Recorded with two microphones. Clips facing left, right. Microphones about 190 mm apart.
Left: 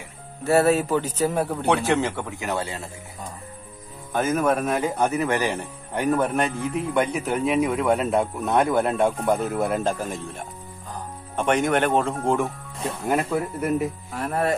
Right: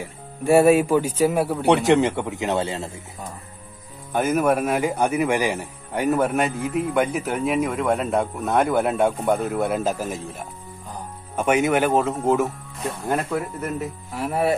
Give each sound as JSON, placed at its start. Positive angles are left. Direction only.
{"t": 0.4, "sound": "a man's voice", "side_deg": -15}
{"t": 1.7, "sound": "a man's voice", "side_deg": -15}
{"t": 4.1, "sound": "a man's voice", "side_deg": -10}